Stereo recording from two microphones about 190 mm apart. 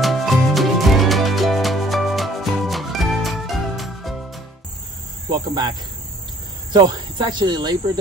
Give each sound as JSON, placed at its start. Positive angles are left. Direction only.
{"t": 0.0, "sound": "music", "side_deg": 0}
{"t": 5.3, "sound": "speech", "side_deg": -20}